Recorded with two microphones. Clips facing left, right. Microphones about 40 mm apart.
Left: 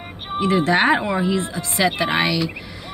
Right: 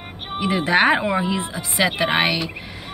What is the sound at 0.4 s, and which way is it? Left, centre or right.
Speech, right.